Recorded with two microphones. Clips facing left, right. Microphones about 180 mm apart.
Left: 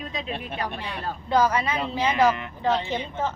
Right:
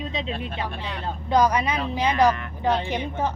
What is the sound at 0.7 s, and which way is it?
Speech, 10° left (ahead or behind).